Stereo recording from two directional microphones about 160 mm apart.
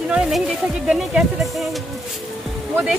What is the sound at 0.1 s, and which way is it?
Speech, 5° right (ahead or behind).